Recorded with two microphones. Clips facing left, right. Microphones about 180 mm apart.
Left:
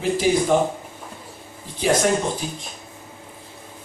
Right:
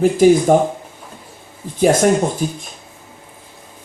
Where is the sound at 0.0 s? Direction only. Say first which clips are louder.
Right 8 dB; 45° right (ahead or behind).